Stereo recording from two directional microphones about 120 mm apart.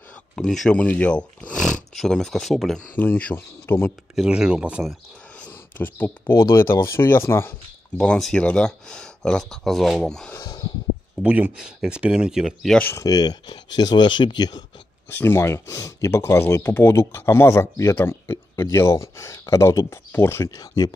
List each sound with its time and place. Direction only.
0.4 s speech: 5° left (ahead or behind)
3.0 s speech: 15° left (ahead or behind)
4.1 s speech: 5° right (ahead or behind)
5.8 s speech: 15° left (ahead or behind)
8.0 s speech: 5° left (ahead or behind)
11.2 s speech: 10° right (ahead or behind)
12.7 s speech: 15° left (ahead or behind)
13.0 s speech: 35° left (ahead or behind)
15.0 s speech: 15° left (ahead or behind)